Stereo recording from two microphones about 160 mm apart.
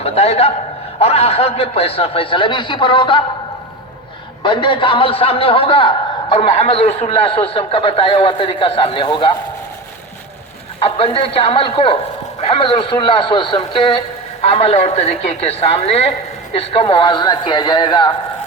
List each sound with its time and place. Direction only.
0.0 s a man's voice: 40° left (ahead or behind)
4.4 s a man's voice: 30° left (ahead or behind)
10.8 s a man's voice: 35° left (ahead or behind)